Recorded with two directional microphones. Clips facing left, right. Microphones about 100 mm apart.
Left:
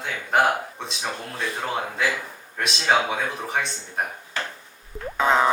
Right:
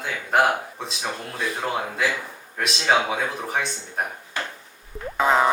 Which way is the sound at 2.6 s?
Centre (ahead or behind).